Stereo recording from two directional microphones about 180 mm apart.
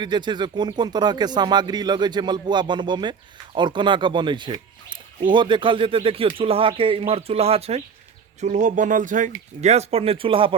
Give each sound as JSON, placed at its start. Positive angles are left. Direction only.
{"t": 0.0, "sound": "speech", "side_deg": -25}